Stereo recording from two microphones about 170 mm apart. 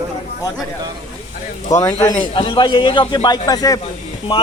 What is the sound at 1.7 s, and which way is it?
A man's voice, 20° left (ahead or behind).